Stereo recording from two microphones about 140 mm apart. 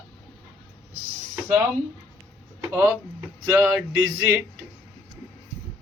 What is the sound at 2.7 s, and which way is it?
Speech, 15° right (ahead or behind).